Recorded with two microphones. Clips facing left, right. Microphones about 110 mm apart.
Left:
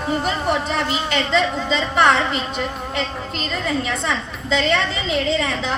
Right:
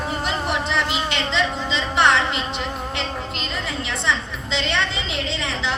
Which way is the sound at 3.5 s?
45° left (ahead or behind).